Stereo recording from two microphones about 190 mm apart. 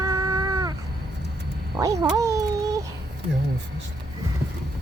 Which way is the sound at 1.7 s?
20° right (ahead or behind).